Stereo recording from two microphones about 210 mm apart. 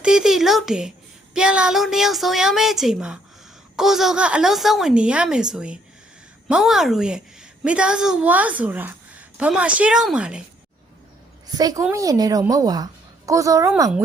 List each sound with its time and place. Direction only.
0.0 s a woman's voice: 5° right (ahead or behind)
11.5 s a woman's voice: 15° right (ahead or behind)